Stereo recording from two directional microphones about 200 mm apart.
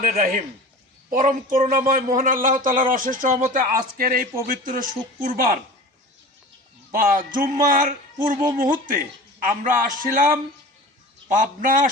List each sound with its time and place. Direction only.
0.0 s a man's voice: 45° right (ahead or behind)
6.9 s a man's voice: 45° right (ahead or behind)
11.3 s a man's voice: 40° right (ahead or behind)